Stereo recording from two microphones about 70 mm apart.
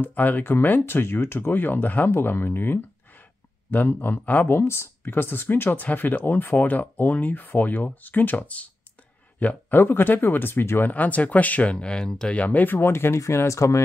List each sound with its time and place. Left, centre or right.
0.0 s speech: left
10.9 s speech: left